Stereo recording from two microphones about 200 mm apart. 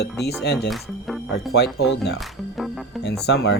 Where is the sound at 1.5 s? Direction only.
55° left (ahead or behind).